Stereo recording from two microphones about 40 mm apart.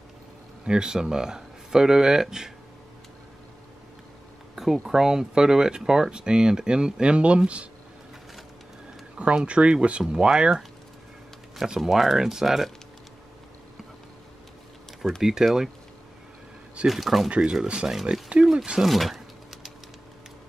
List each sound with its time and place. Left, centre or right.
0.7 s speech: centre
4.8 s speech: centre; by 7.6 s right
9.2 s speech: right; by 12.7 s centre
15.0 s speech: centre
16.8 s speech: centre
17.4 s speech: centre
18.1 s speech: right
18.4 s a sound: centre